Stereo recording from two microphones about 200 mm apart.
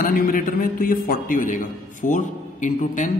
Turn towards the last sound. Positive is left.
turn(degrees=40)  # may be behind; listen again after turning